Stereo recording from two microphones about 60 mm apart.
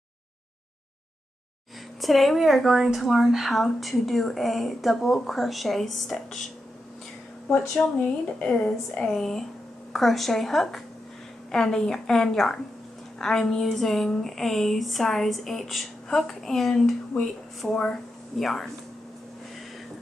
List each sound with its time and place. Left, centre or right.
2.0 s a woman's voice: centre
7.8 s speech: left
8.4 s a woman's voice: centre
18.4 s a woman's voice: centre